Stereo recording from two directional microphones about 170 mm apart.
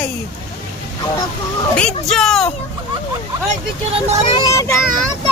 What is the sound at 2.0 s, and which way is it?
Speech, centre (ahead or behind).